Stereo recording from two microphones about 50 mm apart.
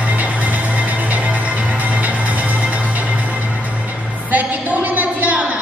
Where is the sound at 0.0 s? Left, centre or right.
Right.